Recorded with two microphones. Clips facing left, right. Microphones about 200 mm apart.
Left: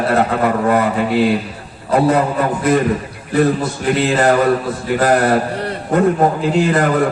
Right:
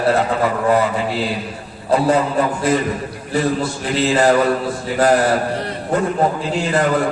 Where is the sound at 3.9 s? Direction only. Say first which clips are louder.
Left 1 dB; 55° left (ahead or behind).